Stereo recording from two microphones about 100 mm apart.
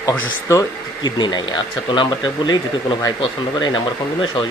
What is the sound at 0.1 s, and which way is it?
Speech, 30° left (ahead or behind).